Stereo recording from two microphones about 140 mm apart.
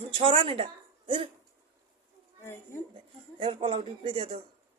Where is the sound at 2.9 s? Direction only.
40° right (ahead or behind).